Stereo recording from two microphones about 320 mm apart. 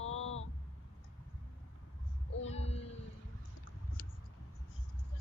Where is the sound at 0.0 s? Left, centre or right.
Left.